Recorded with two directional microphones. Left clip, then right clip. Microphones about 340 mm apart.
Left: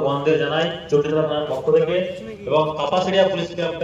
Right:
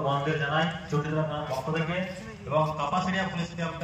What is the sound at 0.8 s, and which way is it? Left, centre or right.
Speech, left.